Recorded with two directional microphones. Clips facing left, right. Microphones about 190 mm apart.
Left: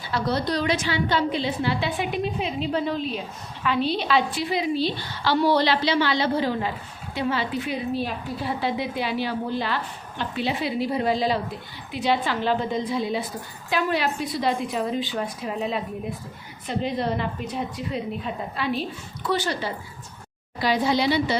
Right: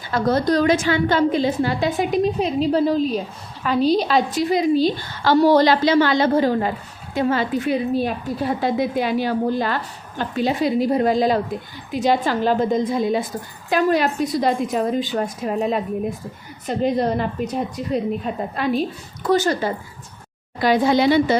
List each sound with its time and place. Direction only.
0.1 s a woman's voice: 45° right (ahead or behind)